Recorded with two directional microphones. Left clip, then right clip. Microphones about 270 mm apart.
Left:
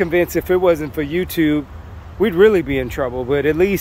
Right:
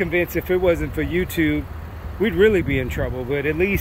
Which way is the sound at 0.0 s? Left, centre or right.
Centre.